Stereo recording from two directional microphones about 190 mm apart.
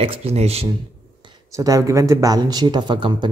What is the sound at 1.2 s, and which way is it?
Speech, 15° right (ahead or behind).